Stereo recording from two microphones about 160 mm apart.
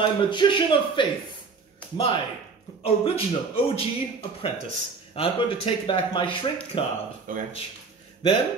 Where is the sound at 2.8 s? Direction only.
35° left (ahead or behind).